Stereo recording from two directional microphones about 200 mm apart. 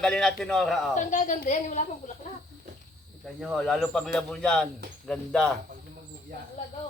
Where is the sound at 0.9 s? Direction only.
40° left (ahead or behind).